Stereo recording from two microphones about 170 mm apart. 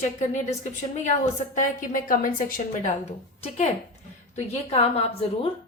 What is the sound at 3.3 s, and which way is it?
A woman's voice, 40° left (ahead or behind).